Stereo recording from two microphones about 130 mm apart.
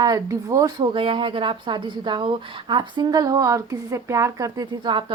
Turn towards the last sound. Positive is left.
turn(degrees=-40)  # may be behind; listen again after turning